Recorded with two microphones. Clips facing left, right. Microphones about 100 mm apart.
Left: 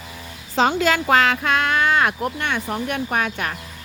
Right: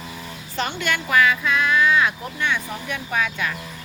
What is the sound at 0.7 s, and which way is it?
Speech, 90° left.